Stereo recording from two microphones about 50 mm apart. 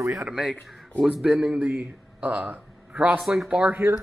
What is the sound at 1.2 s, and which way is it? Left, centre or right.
A man's voice, right.